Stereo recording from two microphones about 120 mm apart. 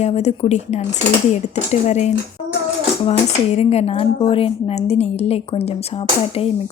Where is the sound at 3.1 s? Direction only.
60° left (ahead or behind).